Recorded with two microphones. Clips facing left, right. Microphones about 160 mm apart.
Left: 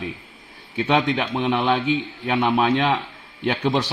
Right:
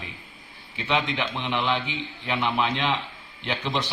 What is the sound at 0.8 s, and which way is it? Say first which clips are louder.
Speech: left 5 dB; 50° left (ahead or behind).